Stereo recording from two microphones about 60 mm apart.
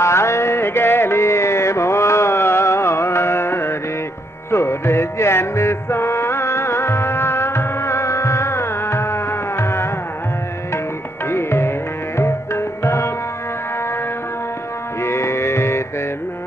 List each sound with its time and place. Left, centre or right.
0.0 s music: left
11.2 s music: left
12.2 s tabla: left
15.0 s music: left